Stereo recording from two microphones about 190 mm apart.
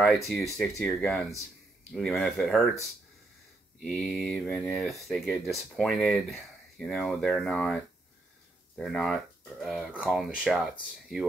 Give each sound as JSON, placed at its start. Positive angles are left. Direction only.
{"t": 0.0, "sound": "speech", "side_deg": 0}
{"t": 3.8, "sound": "speech", "side_deg": 5}